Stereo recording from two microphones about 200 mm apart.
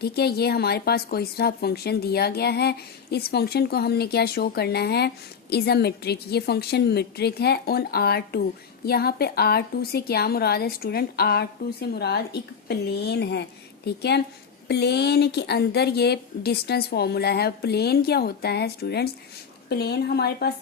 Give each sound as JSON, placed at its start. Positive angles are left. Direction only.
{"t": 0.0, "sound": "speech", "side_deg": 50}